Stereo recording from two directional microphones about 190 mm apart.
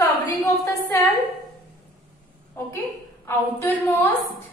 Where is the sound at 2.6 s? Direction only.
10° left (ahead or behind).